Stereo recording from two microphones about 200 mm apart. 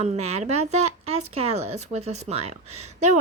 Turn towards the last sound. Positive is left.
turn(degrees=-35)  # may be behind; listen again after turning